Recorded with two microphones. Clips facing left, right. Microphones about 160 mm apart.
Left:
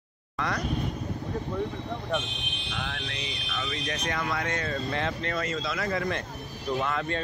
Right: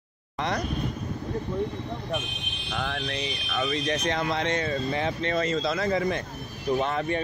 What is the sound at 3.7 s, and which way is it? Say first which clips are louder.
Speech: right 4 dB; 25° right (ahead or behind).